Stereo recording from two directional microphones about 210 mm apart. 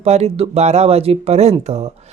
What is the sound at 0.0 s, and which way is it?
Speech, 30° right (ahead or behind).